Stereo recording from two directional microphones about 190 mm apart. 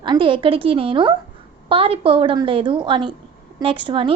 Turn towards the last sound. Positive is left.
turn(degrees=-25)  # may be behind; listen again after turning